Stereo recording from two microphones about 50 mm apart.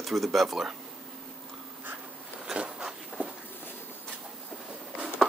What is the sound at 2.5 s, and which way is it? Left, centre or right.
Bee, centre.